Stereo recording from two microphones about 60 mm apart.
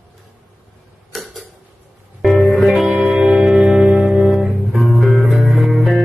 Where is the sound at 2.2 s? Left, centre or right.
Centre.